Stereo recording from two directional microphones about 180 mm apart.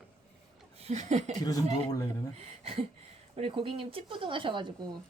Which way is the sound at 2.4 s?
35° right (ahead or behind).